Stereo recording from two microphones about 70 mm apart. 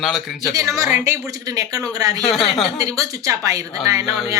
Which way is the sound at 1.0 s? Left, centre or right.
Right.